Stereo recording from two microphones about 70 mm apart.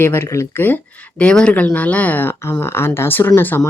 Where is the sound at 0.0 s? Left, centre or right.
Left.